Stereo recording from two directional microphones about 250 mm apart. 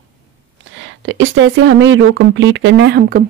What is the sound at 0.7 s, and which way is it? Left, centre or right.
Speech, right.